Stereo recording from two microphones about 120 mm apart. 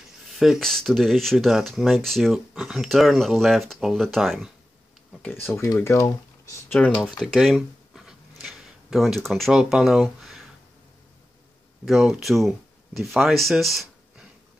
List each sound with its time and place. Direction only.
0.3 s speech: centre (ahead or behind)
5.3 s speech: 20° left (ahead or behind)
7.0 s speech: centre (ahead or behind)
11.8 s speech: centre (ahead or behind)